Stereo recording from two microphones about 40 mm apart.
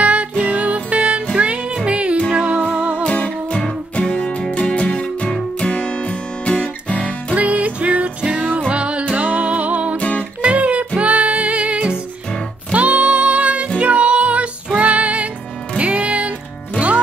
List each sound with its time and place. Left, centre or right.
0.0 s music: right
3.0 s music: left
7.3 s music: right
8.2 s music: right
9.9 s music: left
10.4 s music: right